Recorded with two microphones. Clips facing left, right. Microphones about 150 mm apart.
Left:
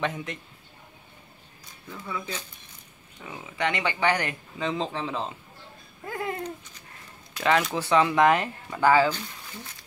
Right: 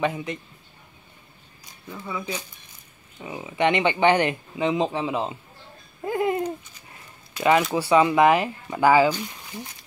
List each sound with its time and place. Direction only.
0.0 s a man's voice: 5° right (ahead or behind)
1.9 s speech: 10° right (ahead or behind)
6.0 s a sound: 20° right (ahead or behind)
7.3 s speech: 5° right (ahead or behind)